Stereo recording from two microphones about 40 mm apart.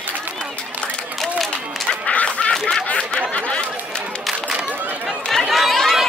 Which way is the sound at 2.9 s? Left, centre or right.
Left.